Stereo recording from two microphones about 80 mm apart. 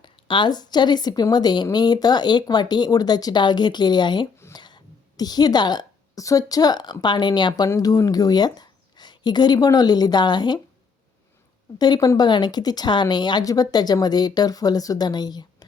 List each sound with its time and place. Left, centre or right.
0.0 s speech: left
4.5 s a sound: left
6.1 s speech: left
7.8 s speech: left
11.8 s speech: left
13.4 s speech: left